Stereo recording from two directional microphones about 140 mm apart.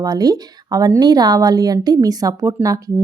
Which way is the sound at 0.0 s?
25° right (ahead or behind).